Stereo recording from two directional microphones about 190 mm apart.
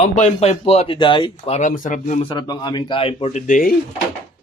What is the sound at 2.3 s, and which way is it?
A man's voice, 20° left (ahead or behind).